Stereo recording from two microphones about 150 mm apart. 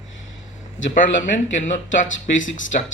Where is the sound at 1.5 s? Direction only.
55° left (ahead or behind).